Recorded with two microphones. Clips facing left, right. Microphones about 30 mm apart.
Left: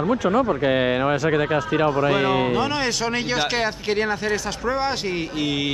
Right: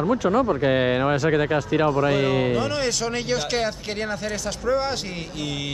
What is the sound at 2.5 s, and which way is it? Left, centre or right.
Speech, centre.